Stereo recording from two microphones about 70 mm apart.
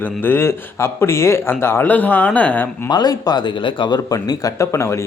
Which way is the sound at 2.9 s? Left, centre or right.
Left.